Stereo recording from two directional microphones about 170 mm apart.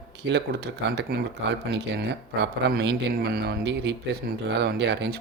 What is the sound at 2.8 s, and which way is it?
Speech, 75° right (ahead or behind).